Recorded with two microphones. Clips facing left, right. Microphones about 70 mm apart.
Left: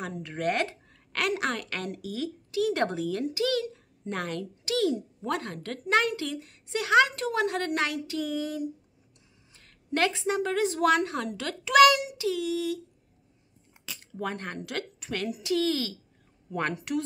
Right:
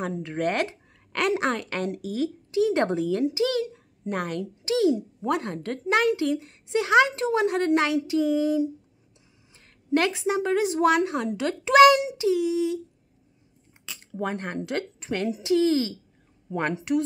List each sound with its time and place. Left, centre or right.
0.0 s a child's voice: right
14.1 s a child's voice: right